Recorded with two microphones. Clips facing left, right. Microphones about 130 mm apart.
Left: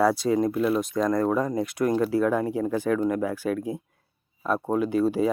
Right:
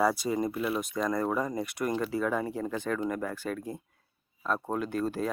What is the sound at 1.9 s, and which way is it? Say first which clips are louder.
Speech: left 6 dB; 5° left (ahead or behind).